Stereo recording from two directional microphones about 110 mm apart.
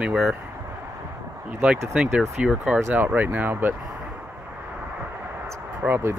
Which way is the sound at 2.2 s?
5° right (ahead or behind).